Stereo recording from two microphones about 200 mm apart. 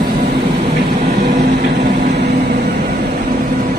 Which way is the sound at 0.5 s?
30° right (ahead or behind).